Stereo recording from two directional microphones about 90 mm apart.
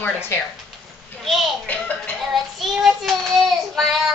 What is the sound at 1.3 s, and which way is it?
Speech, centre (ahead or behind).